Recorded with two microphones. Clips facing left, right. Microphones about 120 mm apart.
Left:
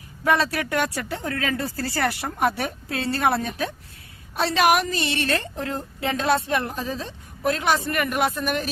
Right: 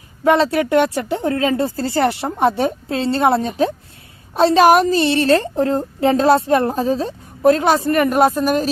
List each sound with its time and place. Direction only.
0.3 s a woman's voice: 25° right (ahead or behind)